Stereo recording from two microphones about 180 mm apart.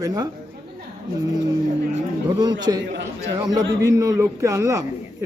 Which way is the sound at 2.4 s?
25° right (ahead or behind).